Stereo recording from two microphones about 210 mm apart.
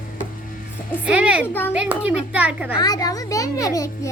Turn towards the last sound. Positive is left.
turn(degrees=15)  # may be behind; listen again after turning